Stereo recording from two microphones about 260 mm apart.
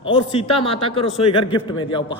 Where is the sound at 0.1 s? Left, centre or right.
Left.